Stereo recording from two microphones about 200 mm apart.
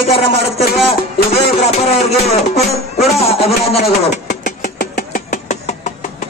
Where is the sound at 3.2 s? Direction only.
30° left (ahead or behind).